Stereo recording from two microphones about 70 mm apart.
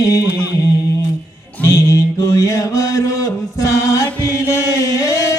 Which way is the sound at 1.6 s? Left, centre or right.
Left.